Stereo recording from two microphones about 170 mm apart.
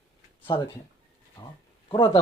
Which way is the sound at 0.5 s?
30° left (ahead or behind).